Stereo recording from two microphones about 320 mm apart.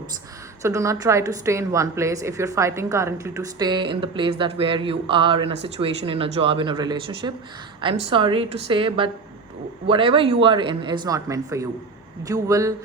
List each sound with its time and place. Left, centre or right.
0.6 s a woman's voice: centre